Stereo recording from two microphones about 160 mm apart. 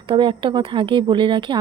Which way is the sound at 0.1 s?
30° right (ahead or behind).